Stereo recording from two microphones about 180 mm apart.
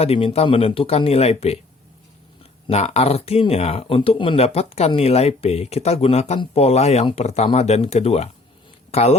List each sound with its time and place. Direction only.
0.0 s speech: 30° left (ahead or behind)